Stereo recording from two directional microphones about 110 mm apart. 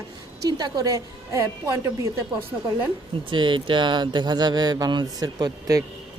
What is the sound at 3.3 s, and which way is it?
Speech, 45° right (ahead or behind).